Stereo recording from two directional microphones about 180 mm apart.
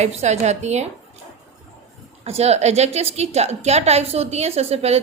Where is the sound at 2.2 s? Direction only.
35° right (ahead or behind).